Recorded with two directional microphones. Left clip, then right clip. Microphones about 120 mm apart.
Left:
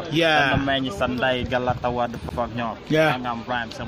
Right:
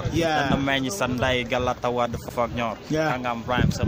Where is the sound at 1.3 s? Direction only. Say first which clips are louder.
Even; 20° right (ahead or behind).